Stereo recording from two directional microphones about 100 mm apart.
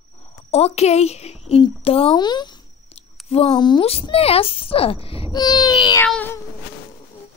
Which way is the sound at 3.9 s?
75° left (ahead or behind).